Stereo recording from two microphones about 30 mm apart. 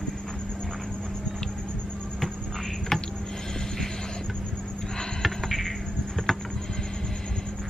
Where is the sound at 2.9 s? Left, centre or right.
Centre.